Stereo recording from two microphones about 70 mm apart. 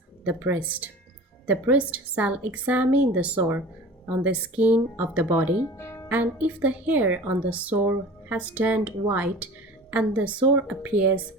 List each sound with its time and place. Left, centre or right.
0.3 s a woman's voice: right
5.7 s music: left
6.1 s a woman's voice: right